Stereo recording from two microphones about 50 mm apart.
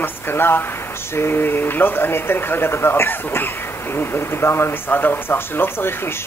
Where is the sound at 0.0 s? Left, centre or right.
Left.